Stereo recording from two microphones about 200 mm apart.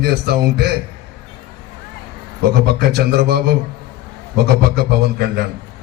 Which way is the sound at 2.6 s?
50° right (ahead or behind).